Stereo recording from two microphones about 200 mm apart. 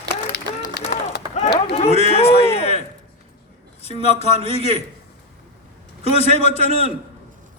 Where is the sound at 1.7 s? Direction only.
30° left (ahead or behind).